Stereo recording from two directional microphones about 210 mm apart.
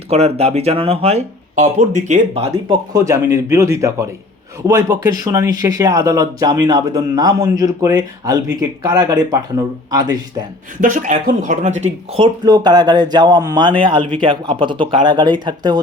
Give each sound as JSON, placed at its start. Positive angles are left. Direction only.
{"t": 0.1, "sound": "speech", "side_deg": -30}
{"t": 2.9, "sound": "speech", "side_deg": -15}
{"t": 10.8, "sound": "speech", "side_deg": -35}